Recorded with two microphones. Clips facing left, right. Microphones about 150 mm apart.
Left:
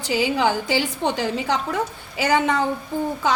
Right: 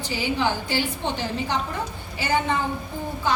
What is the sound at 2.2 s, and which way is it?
Speech, 90° left.